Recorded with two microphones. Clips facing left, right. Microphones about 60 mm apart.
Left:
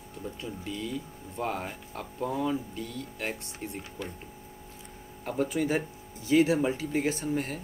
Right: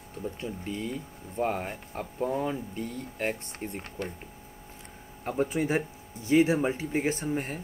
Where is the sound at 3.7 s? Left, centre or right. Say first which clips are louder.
Right 3 dB; right.